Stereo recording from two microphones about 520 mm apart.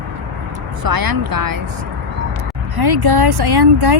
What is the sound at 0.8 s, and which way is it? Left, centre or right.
Speech, right.